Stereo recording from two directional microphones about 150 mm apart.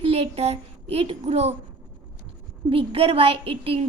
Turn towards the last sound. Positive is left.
turn(degrees=-40)  # may be behind; listen again after turning